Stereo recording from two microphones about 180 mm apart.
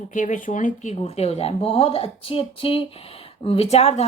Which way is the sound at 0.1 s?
45° left (ahead or behind).